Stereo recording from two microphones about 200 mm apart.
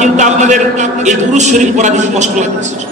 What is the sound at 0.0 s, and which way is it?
A man's voice, 35° right (ahead or behind).